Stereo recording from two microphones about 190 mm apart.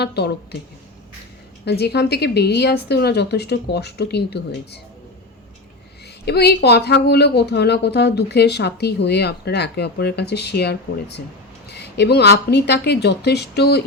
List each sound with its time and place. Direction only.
0.0 s a woman's voice: 60° left (ahead or behind)
1.6 s a woman's voice: 60° left (ahead or behind)
6.2 s a woman's voice: 60° left (ahead or behind)